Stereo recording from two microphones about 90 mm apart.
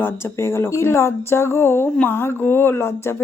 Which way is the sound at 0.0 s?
30° left (ahead or behind).